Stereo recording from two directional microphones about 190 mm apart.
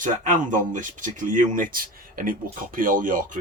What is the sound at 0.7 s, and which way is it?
A man's voice, 45° right (ahead or behind).